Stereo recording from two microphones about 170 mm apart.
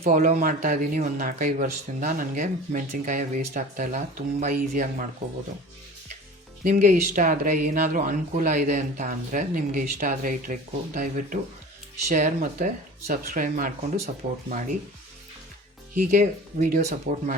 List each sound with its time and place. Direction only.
0.0 s a man's voice: 45° right (ahead or behind)
4.5 s speech: 60° right (ahead or behind)
6.7 s a man's voice: 50° right (ahead or behind)
16.1 s a man's voice: 45° right (ahead or behind)